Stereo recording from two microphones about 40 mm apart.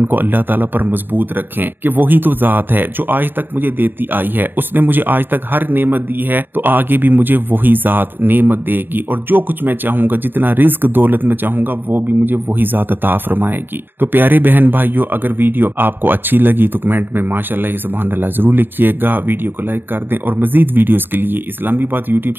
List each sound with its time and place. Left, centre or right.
0.0 s speech: right